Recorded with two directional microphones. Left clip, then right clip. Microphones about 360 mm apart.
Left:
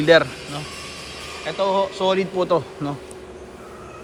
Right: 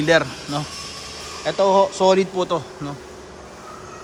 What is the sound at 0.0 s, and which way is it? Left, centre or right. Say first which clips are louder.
A man's voice: left 2 dB; centre.